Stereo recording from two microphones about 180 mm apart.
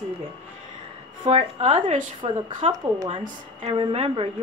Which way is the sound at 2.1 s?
25° right (ahead or behind).